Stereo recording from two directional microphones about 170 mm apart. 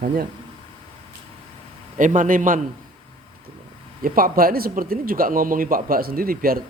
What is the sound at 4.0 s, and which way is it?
A man's voice, 55° right (ahead or behind).